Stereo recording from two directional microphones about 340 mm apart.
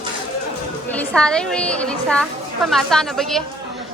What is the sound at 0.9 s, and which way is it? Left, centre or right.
A woman's voice, centre.